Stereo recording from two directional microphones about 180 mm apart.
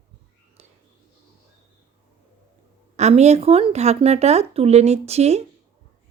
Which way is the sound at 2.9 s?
40° right (ahead or behind).